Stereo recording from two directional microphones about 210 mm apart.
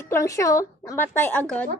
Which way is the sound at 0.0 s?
15° left (ahead or behind).